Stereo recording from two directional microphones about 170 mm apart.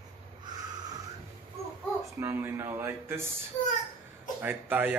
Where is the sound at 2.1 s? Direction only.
15° right (ahead or behind).